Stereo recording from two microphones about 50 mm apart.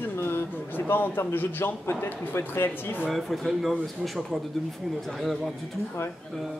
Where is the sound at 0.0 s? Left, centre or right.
Left.